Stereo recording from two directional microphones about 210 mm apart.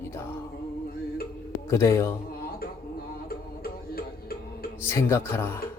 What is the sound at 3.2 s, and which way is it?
Music, 45° left (ahead or behind).